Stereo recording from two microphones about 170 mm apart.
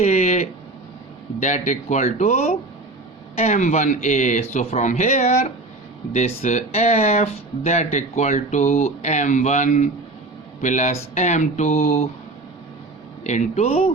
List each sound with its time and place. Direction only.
0.0 s a sound: 40° left (ahead or behind)
1.4 s speech: 45° left (ahead or behind)
13.2 s speech: 45° left (ahead or behind)